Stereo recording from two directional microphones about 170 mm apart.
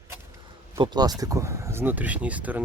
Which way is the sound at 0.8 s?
25° right (ahead or behind).